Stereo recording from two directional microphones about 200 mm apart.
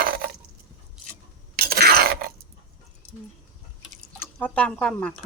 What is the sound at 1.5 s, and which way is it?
Shatter, 50° right (ahead or behind).